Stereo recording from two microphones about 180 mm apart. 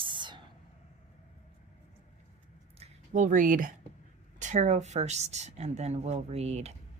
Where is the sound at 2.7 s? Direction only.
40° right (ahead or behind).